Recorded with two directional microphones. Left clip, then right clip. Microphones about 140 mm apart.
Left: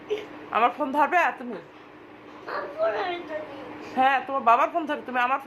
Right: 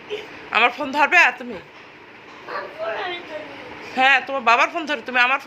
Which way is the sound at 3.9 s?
5° right (ahead or behind).